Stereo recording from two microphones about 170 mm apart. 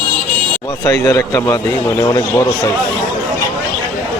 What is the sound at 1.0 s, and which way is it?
A man's voice, 15° left (ahead or behind).